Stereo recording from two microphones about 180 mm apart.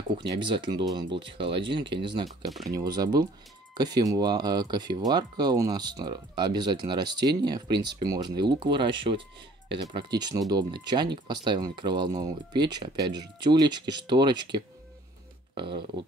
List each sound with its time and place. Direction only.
0.3 s speech: 25° right (ahead or behind)